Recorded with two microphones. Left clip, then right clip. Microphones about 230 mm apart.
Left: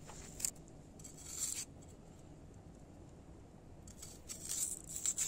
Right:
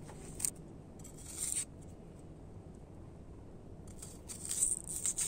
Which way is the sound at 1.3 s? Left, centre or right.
Centre.